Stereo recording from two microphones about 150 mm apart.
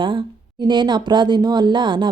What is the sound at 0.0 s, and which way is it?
Speech, 35° right (ahead or behind).